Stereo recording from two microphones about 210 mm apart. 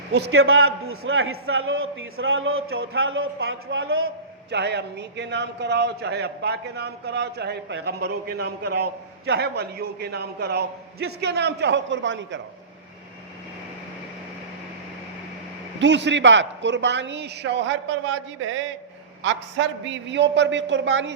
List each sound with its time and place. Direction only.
0.3 s a man's voice: 80° right
4.5 s a man's voice: 55° right (ahead or behind)
15.8 s a man's voice: 55° right (ahead or behind)